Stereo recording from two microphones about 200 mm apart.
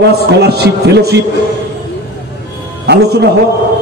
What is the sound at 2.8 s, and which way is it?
Speech, 55° right (ahead or behind).